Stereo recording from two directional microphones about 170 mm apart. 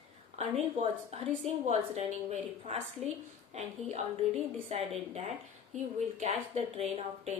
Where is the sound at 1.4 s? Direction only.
40° right (ahead or behind).